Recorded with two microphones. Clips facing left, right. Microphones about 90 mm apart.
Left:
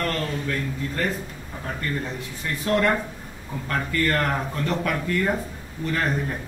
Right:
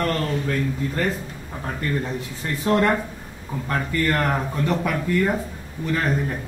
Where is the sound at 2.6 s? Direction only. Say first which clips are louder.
Right 2 dB; 30° right (ahead or behind).